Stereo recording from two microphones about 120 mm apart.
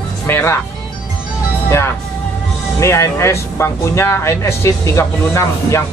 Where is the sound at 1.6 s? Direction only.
20° left (ahead or behind).